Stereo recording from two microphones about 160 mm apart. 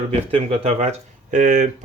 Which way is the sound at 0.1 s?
35° right (ahead or behind).